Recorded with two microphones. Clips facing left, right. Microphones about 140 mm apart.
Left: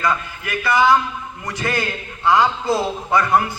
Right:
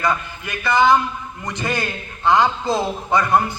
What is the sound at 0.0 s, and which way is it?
A man's voice, 20° right (ahead or behind).